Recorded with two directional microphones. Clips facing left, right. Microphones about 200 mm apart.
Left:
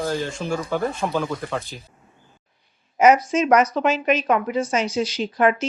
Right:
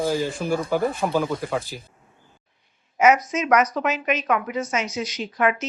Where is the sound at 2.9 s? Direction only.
35° left (ahead or behind).